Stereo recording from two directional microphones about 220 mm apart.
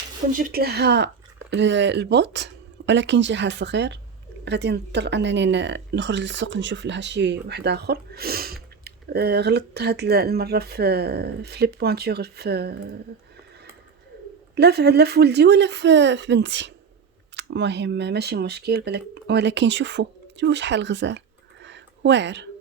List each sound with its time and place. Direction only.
0.3 s speech: 45° right (ahead or behind)
14.5 s speech: 50° right (ahead or behind)
21.6 s a sound: 55° right (ahead or behind)